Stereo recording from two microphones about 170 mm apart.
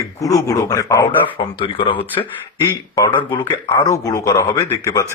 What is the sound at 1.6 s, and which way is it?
Speech, 30° left (ahead or behind).